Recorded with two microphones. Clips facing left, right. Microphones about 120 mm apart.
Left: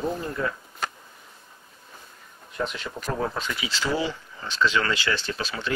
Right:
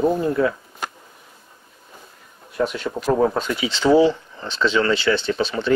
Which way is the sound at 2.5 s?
5° right (ahead or behind).